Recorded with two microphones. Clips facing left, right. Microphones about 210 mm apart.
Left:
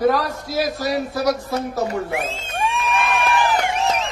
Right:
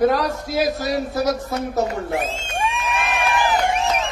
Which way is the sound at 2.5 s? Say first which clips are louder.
Left 3 dB; 15° right (ahead or behind).